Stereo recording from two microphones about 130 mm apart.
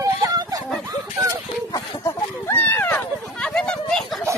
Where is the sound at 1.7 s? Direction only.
20° left (ahead or behind).